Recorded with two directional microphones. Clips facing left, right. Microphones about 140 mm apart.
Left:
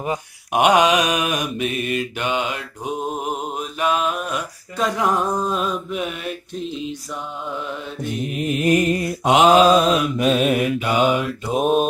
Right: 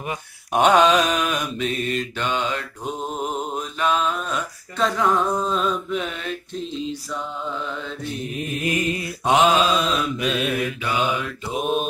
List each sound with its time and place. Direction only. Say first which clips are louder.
0.5 s mantra: even; 15° left (ahead or behind)
3.8 s a sound: left 1 dB; 15° left (ahead or behind)
8.0 s mantra: left 7 dB; 15° left (ahead or behind)
8.7 s mantra: left 6 dB; 45° left (ahead or behind)